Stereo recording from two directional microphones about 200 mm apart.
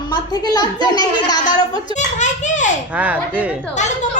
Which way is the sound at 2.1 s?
35° left (ahead or behind).